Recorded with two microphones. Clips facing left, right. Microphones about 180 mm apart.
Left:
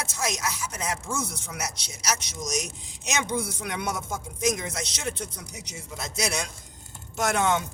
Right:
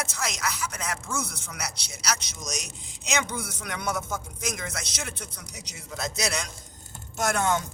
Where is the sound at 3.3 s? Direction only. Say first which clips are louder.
Left 5 dB; 25° left (ahead or behind).